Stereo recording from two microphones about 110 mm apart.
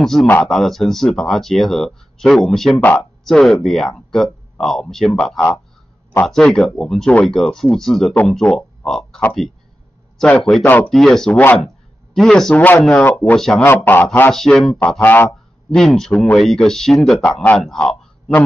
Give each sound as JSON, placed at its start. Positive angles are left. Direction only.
{"t": 0.0, "sound": "speech", "side_deg": 0}
{"t": 10.2, "sound": "speech", "side_deg": 15}
{"t": 10.9, "sound": "speech", "side_deg": 0}
{"t": 12.5, "sound": "speech", "side_deg": 20}
{"t": 13.6, "sound": "speech", "side_deg": 20}
{"t": 14.3, "sound": "speech", "side_deg": 5}
{"t": 15.0, "sound": "speech", "side_deg": 20}
{"t": 15.7, "sound": "speech", "side_deg": 5}